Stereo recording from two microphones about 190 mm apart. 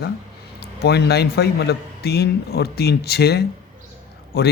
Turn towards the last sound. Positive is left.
turn(degrees=55)  # may be behind; listen again after turning